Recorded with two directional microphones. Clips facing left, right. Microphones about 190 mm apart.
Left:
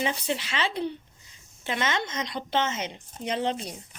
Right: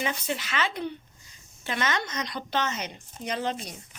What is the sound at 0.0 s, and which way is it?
A woman's voice, 30° left (ahead or behind).